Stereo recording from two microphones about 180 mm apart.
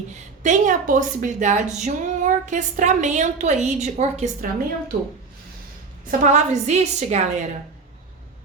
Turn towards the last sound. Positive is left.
turn(degrees=-40)  # may be behind; listen again after turning